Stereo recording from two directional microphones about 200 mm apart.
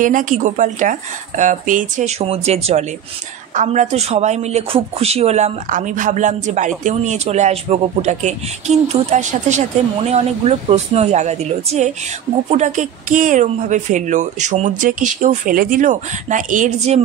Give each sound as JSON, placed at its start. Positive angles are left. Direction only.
{"t": 0.0, "sound": "a man's voice", "side_deg": -40}